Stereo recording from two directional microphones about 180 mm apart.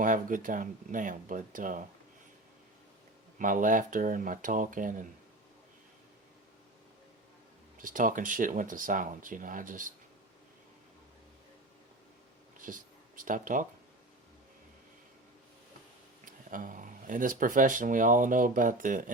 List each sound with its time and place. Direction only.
0.0 s speech: 45° right (ahead or behind)
3.3 s speech: 50° right (ahead or behind)
7.8 s speech: 50° right (ahead or behind)
12.5 s a sound: 50° right (ahead or behind)
16.2 s speech: 50° right (ahead or behind)